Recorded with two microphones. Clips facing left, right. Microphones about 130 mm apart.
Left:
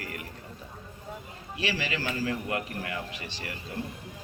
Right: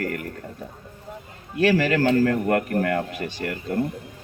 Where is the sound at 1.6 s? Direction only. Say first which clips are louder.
Right 13 dB; 50° right (ahead or behind).